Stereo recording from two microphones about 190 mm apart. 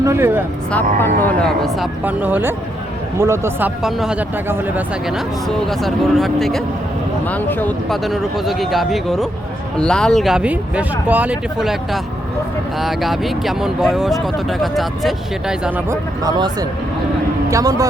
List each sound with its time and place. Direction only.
0.0 s speech: 15° right (ahead or behind)
0.7 s speech: 10° left (ahead or behind)
15.9 s speech: 20° right (ahead or behind)